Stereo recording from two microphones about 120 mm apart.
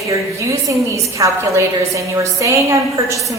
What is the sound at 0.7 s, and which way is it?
A woman's voice, 25° right (ahead or behind).